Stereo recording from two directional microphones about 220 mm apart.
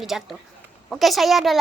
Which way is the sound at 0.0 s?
Centre (ahead or behind).